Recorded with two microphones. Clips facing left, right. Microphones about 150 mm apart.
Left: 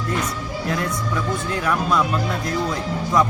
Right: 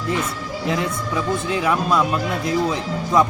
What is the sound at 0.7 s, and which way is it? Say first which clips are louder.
A man's voice: right 2 dB; 15° right (ahead or behind).